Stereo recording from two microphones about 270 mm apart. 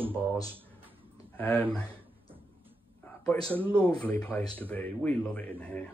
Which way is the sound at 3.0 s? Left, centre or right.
Centre.